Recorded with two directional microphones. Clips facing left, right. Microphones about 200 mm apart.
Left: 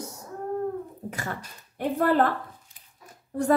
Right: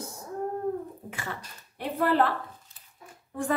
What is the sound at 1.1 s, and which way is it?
A woman's voice, 45° left (ahead or behind).